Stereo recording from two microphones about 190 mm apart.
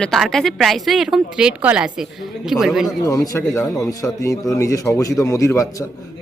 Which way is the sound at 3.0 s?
15° left (ahead or behind).